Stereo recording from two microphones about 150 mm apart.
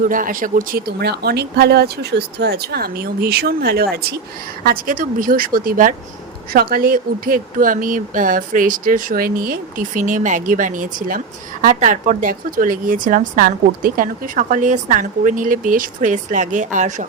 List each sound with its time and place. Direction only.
0.1 s speech: 65° right (ahead or behind); by 4.0 s 90° right
4.6 s speech: 70° right (ahead or behind)
6.5 s speech: 80° right; by 17.1 s 55° right (ahead or behind)